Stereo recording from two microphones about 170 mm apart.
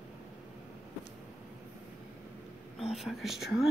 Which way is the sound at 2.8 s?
Centre (ahead or behind).